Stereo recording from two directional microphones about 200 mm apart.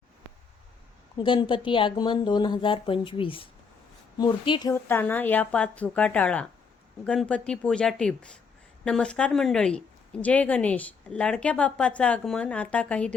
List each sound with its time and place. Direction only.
1.2 s speech: 25° left (ahead or behind)
4.7 s speech: 10° left (ahead or behind)